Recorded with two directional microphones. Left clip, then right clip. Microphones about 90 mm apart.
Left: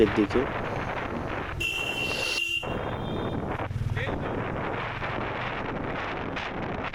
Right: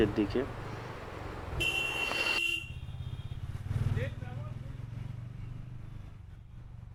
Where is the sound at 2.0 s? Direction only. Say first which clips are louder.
Left 3 dB; 40° left (ahead or behind).